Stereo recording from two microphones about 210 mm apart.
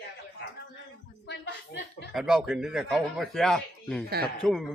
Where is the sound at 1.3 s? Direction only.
55° left (ahead or behind).